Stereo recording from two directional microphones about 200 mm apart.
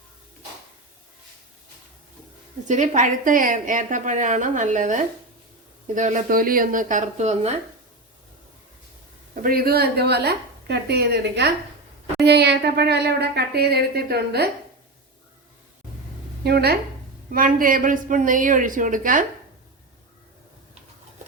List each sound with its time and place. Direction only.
2.6 s a woman's voice: 35° right (ahead or behind)
9.3 s a woman's voice: 45° right (ahead or behind)
16.4 s a woman's voice: 55° right (ahead or behind)